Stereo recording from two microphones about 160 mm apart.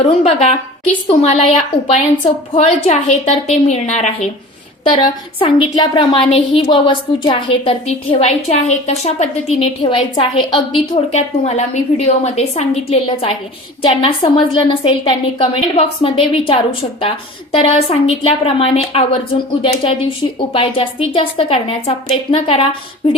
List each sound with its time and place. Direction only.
0.0 s a woman's voice: 40° left (ahead or behind)
4.8 s a woman's voice: 35° left (ahead or behind)
9.8 s a woman's voice: 30° left (ahead or behind)
11.1 s a woman's voice: 45° left (ahead or behind)